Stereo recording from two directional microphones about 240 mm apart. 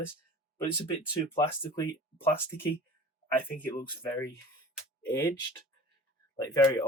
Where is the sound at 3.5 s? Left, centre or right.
Centre.